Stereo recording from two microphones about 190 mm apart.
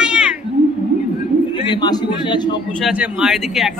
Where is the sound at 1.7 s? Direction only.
20° left (ahead or behind).